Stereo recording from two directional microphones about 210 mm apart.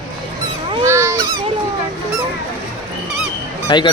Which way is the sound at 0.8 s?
15° right (ahead or behind).